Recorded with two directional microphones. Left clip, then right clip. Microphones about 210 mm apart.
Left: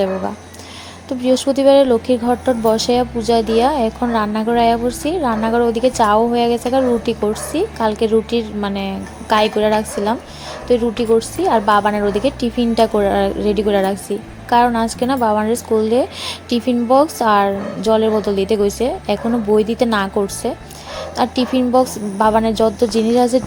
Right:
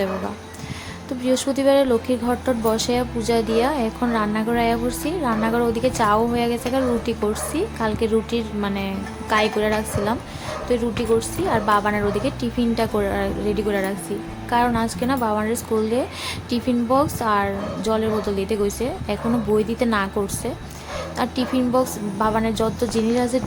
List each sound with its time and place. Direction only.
1.2 s a woman's voice: 10° left (ahead or behind)